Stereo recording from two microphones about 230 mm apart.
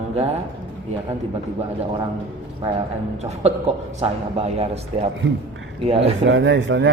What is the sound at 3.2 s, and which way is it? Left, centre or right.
A man's voice, right.